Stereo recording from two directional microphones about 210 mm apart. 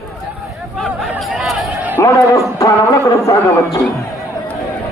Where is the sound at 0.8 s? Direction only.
5° right (ahead or behind).